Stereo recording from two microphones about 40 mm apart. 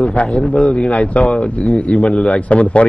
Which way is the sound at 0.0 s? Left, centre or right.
Left.